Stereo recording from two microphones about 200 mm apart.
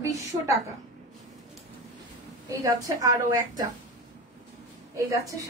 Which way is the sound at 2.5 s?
15° right (ahead or behind).